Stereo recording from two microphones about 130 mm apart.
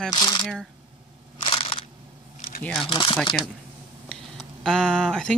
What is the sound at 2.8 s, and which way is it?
Speech, 40° left (ahead or behind).